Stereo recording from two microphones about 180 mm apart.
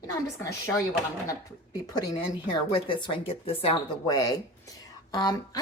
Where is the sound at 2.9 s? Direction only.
30° left (ahead or behind).